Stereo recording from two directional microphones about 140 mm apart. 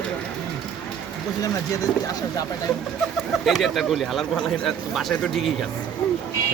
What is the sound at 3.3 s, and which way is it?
Speech, centre (ahead or behind).